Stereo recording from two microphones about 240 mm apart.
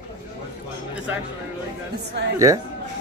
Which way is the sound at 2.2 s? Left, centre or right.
Right.